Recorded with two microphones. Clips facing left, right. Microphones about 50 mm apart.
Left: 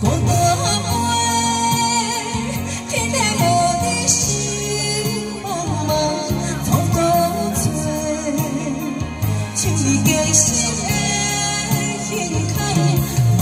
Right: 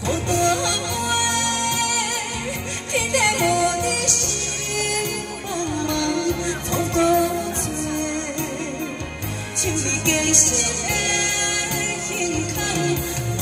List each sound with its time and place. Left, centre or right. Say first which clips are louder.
0.0 s music: left 3 dB; right
3.2 s music: left 3 dB; right
5.9 s music: left 4 dB; right
9.8 s music: left 6 dB; right
12.7 s music: left 3 dB; right